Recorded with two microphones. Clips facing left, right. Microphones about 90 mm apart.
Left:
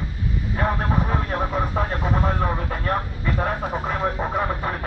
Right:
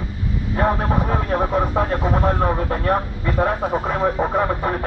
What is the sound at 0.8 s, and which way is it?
Speech, 20° right (ahead or behind).